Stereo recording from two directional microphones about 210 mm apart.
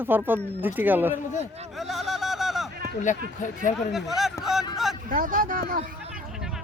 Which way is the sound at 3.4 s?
35° left (ahead or behind).